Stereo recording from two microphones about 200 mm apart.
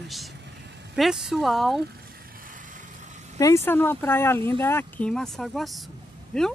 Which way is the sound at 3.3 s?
15° left (ahead or behind).